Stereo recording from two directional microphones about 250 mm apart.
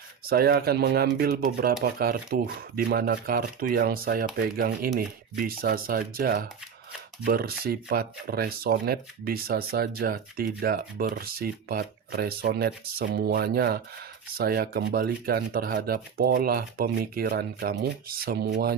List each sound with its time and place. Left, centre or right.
0.3 s speech: right